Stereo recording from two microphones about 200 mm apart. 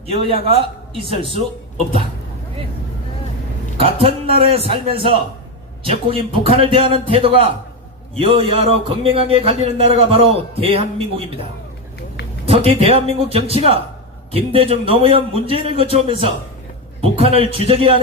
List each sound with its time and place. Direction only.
0.1 s a man's voice: 30° right (ahead or behind)
3.8 s a man's voice: 25° right (ahead or behind)
12.5 s a man's voice: 30° right (ahead or behind)